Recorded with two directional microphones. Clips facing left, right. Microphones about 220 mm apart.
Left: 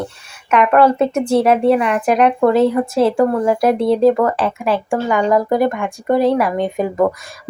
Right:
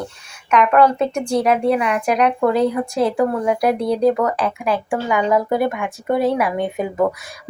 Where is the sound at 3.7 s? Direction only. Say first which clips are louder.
Left 5 dB; 25° left (ahead or behind).